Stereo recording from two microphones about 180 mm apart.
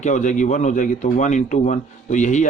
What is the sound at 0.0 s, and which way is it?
A man's voice, 40° left (ahead or behind).